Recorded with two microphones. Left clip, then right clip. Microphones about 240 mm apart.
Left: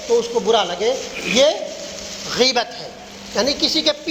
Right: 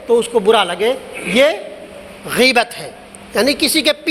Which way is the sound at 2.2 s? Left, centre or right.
Right.